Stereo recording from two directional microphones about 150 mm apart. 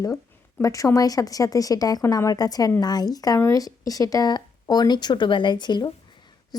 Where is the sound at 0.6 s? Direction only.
20° left (ahead or behind).